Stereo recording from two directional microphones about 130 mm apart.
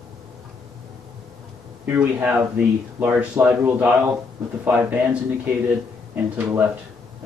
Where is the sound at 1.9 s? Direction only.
15° right (ahead or behind).